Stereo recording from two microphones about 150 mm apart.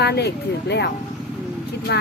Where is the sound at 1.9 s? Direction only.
90° left.